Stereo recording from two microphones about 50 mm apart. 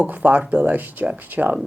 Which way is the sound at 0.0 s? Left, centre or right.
Right.